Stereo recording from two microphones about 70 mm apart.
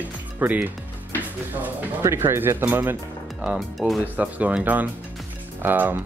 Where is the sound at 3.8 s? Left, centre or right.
Centre.